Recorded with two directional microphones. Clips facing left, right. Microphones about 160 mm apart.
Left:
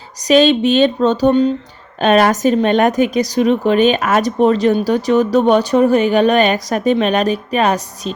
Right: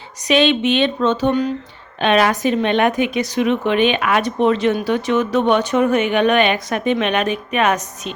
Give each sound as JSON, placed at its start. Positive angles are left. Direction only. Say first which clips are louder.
{"t": 0.2, "sound": "a woman's voice", "louder": "left 4 dB", "side_deg": 40}
{"t": 2.0, "sound": "a woman's voice", "louder": "left 4 dB", "side_deg": 40}